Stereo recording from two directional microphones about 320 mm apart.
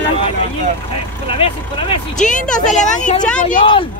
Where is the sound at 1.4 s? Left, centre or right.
Centre.